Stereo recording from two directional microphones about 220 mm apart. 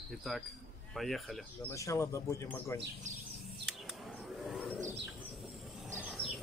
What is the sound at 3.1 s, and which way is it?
Bird, 35° right (ahead or behind).